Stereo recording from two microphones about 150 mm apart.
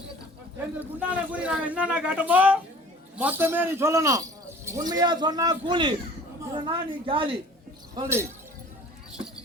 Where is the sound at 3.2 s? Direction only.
15° right (ahead or behind); by 7.3 s 35° right (ahead or behind).